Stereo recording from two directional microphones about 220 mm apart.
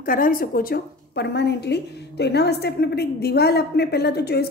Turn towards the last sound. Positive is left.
turn(degrees=45)  # may be behind; listen again after turning